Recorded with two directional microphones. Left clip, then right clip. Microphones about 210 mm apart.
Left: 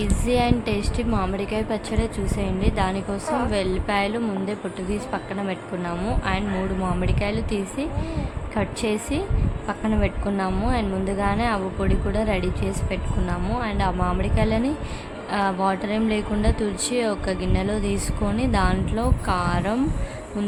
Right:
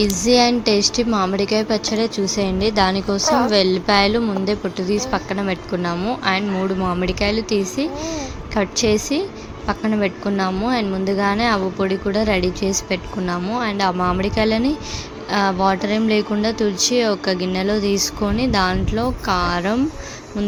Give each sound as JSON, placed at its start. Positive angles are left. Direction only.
{"t": 0.0, "sound": "a woman's voice", "side_deg": -25}
{"t": 2.0, "sound": "speech", "side_deg": 0}
{"t": 2.4, "sound": "a woman's voice", "side_deg": -25}